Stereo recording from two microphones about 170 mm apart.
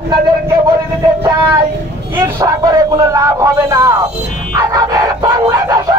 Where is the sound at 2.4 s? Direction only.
20° right (ahead or behind).